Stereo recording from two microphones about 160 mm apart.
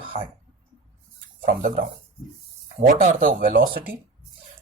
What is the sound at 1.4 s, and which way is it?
Speech, 60° right (ahead or behind).